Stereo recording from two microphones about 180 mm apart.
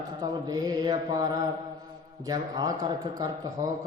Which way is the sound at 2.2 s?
20° right (ahead or behind).